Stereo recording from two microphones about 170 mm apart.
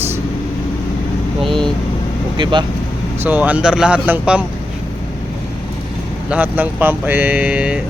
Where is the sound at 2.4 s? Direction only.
30° right (ahead or behind).